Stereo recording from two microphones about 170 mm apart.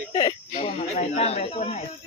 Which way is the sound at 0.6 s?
40° left (ahead or behind).